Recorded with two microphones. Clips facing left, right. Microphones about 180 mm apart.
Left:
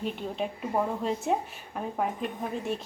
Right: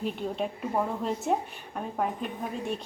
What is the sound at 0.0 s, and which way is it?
A woman's voice, centre (ahead or behind).